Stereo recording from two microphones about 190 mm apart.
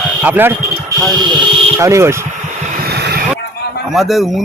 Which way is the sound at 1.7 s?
15° right (ahead or behind).